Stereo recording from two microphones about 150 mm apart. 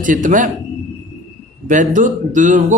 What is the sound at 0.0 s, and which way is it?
Speech, 60° right (ahead or behind).